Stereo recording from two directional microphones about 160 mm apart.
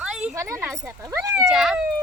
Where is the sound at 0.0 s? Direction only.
5° right (ahead or behind).